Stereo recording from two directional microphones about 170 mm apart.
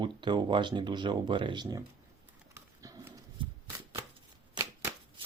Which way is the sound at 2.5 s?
15° right (ahead or behind).